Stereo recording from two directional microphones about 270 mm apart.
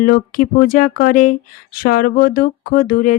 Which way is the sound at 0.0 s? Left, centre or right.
Left.